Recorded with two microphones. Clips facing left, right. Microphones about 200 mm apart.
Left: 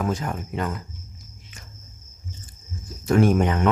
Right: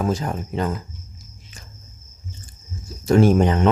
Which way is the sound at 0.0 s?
30° right (ahead or behind).